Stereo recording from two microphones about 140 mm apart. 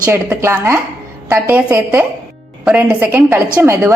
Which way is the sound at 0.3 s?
15° right (ahead or behind).